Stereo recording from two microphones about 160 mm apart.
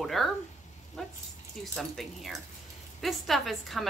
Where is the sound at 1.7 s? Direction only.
Centre (ahead or behind).